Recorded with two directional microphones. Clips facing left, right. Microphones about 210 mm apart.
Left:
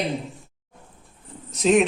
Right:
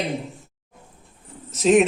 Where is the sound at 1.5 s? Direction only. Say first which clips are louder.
Right 2 dB; centre (ahead or behind).